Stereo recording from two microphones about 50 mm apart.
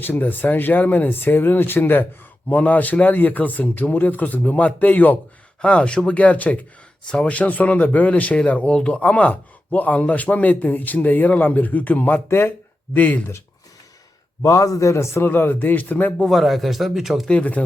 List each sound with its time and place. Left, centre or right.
0.0 s a man's voice: left
5.6 s a man's voice: left
12.3 s speech: left
14.4 s a man's voice: left
15.3 s a man's voice: left
16.3 s speech: centre
17.2 s speech: left